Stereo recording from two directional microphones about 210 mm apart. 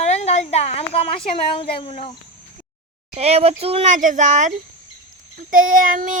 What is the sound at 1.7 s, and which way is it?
Speech, 25° left (ahead or behind).